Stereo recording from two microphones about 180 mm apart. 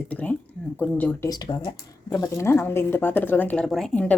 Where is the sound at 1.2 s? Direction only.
20° left (ahead or behind).